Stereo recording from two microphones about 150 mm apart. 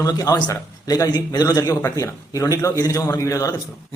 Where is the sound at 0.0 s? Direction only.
25° left (ahead or behind).